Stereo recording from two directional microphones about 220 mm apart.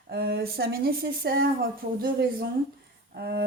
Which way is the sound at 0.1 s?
45° right (ahead or behind).